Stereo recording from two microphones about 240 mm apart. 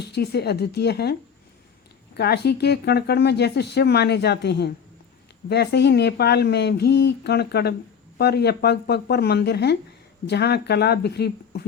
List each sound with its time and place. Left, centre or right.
0.0 s speech: left
2.1 s speech: left